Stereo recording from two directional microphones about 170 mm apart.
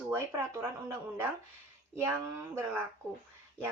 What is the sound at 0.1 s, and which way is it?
Speech, 15° right (ahead or behind).